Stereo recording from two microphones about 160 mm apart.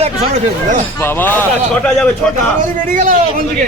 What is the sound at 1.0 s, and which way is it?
Speech, 15° left (ahead or behind).